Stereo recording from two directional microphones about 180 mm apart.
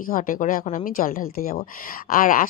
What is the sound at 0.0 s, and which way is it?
A woman's voice, 50° left (ahead or behind).